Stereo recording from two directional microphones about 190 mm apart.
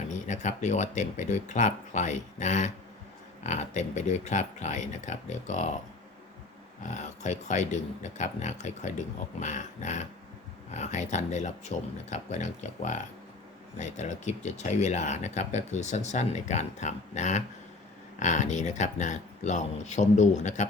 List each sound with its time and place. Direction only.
0.3 s speech: 40° left (ahead or behind)
6.8 s speech: 40° left (ahead or behind)